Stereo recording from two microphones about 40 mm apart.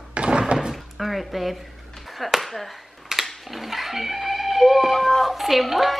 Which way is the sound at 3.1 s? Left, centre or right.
Centre.